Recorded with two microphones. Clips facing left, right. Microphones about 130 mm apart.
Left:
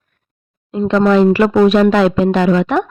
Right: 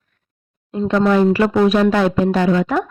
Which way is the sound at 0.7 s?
90° left.